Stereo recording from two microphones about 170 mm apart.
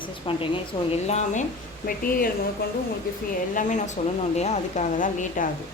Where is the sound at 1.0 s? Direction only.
40° left (ahead or behind).